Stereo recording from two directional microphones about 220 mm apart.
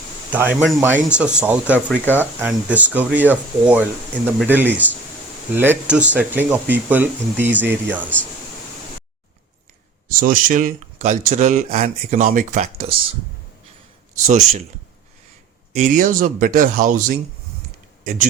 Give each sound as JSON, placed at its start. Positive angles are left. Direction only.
{"t": 0.3, "sound": "speech", "side_deg": -5}
{"t": 10.1, "sound": "speech", "side_deg": -40}
{"t": 14.3, "sound": "speech", "side_deg": -35}
{"t": 15.7, "sound": "speech", "side_deg": -35}